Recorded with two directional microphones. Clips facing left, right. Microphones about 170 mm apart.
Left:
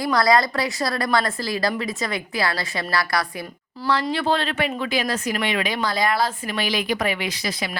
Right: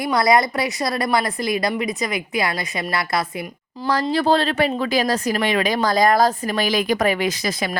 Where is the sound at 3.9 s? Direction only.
40° right (ahead or behind).